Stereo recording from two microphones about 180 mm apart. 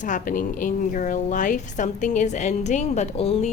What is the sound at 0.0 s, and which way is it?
A woman's voice, 45° left (ahead or behind).